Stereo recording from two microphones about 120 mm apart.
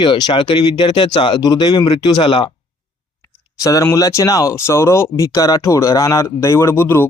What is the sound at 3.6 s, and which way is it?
Speech, 30° left (ahead or behind).